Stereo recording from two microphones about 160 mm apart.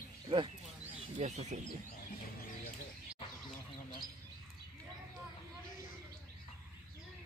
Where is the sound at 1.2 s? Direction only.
50° right (ahead or behind).